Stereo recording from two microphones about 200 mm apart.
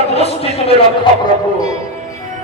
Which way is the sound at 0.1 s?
30° left (ahead or behind).